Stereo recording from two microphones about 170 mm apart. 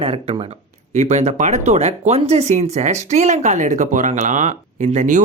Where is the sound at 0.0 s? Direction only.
35° right (ahead or behind).